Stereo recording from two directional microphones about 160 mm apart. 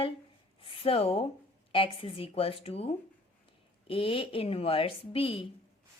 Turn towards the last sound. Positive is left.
turn(degrees=35)  # may be behind; listen again after turning